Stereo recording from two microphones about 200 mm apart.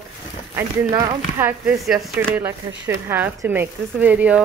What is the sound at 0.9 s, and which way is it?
Speech, 20° right (ahead or behind).